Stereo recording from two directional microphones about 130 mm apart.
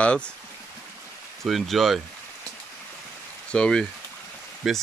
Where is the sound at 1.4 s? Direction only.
Centre (ahead or behind).